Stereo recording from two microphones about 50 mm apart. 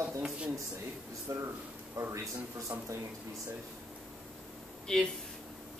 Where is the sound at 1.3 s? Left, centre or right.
Right.